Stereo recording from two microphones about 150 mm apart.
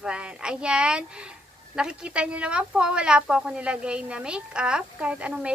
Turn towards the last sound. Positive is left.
turn(degrees=-10)  # may be behind; listen again after turning